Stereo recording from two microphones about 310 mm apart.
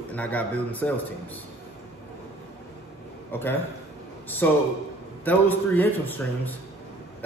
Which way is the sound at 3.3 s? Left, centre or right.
Centre.